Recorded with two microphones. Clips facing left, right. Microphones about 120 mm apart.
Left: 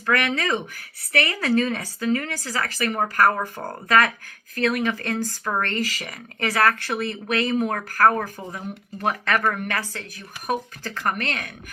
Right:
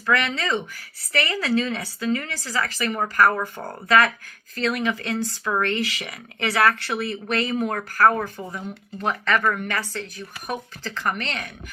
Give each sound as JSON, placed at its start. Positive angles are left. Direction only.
{"t": 0.1, "sound": "speech", "side_deg": 50}